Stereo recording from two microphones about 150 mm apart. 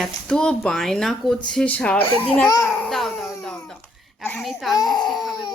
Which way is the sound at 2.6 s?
5° left (ahead or behind).